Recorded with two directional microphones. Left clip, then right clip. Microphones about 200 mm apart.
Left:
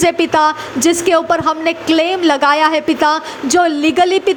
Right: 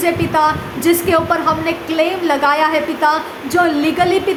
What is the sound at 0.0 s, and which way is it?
A woman's voice, 40° left (ahead or behind).